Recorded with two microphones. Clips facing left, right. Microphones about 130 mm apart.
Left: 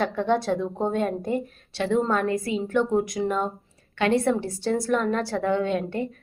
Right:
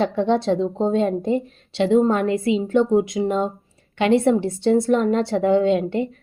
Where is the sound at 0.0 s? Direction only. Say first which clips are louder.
Right 4 dB; 25° right (ahead or behind).